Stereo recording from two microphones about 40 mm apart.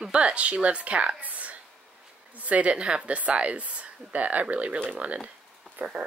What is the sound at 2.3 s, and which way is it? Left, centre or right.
A woman's voice, right.